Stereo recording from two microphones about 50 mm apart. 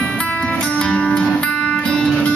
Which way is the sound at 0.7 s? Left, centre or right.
Left.